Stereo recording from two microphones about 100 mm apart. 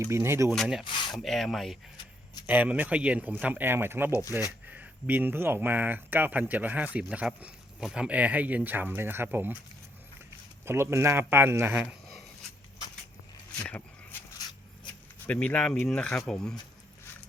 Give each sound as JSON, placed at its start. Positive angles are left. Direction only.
{"t": 0.0, "sound": "speech", "side_deg": -25}
{"t": 0.5, "sound": "speech", "side_deg": 0}
{"t": 2.5, "sound": "speech", "side_deg": -15}
{"t": 4.1, "sound": "speech", "side_deg": 30}
{"t": 4.6, "sound": "speech", "side_deg": -15}
{"t": 10.7, "sound": "speech", "side_deg": -25}
{"t": 13.6, "sound": "a sound", "side_deg": 15}
{"t": 15.3, "sound": "speech", "side_deg": 10}